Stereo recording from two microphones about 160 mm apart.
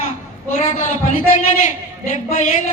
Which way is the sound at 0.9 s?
50° left (ahead or behind).